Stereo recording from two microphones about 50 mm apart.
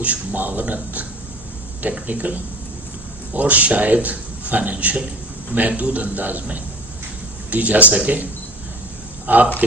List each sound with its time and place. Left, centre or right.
0.0 s a man's voice: right
2.0 s a man's voice: right